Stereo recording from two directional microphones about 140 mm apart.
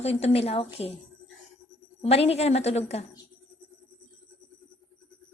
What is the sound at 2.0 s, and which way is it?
Speech, 45° left (ahead or behind).